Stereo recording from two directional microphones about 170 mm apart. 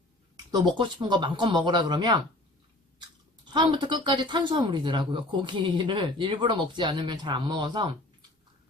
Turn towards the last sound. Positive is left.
turn(degrees=-25)  # may be behind; listen again after turning